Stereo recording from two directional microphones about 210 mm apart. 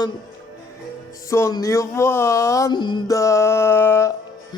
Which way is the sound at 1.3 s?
15° left (ahead or behind).